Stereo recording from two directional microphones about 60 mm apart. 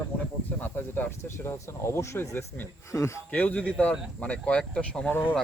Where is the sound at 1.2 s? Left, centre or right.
Left.